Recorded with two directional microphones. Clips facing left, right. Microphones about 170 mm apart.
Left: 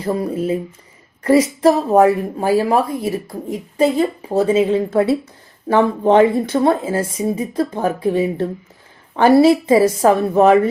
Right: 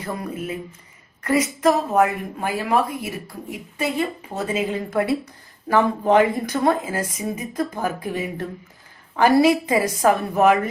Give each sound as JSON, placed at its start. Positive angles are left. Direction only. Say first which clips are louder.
{"t": 0.0, "sound": "a woman's voice", "louder": "left 9 dB", "side_deg": 30}